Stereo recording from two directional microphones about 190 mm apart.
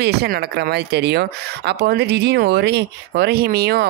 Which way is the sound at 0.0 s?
60° right (ahead or behind).